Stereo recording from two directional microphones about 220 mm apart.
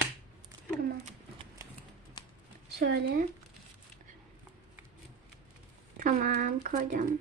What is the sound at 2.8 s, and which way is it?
Speech, 50° right (ahead or behind).